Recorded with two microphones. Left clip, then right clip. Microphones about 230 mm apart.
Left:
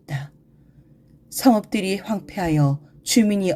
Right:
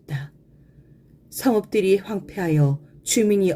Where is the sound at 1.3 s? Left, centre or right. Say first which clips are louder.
Left 2 dB; left.